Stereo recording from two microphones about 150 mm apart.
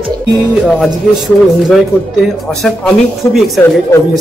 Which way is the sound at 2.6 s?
Centre (ahead or behind).